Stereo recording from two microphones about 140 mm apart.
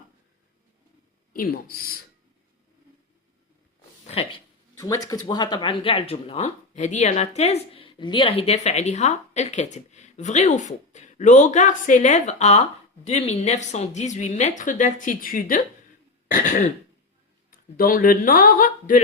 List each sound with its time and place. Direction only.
1.3 s speech: 90° left
4.0 s a sound: 45° left (ahead or behind)
4.8 s speech: 25° left (ahead or behind); by 15.6 s 80° left
16.3 s speech: 65° left (ahead or behind)
17.7 s speech: 90° left; by 19.0 s 70° left (ahead or behind)